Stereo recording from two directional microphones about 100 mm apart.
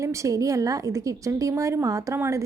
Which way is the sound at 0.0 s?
30° right (ahead or behind).